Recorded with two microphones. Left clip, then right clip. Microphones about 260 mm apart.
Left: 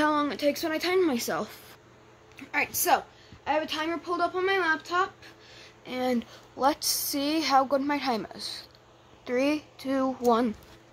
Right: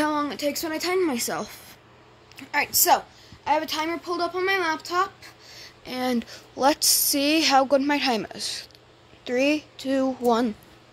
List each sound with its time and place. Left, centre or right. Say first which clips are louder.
0.0 s speech: even; centre
2.3 s a woman's voice: right 4 dB; centre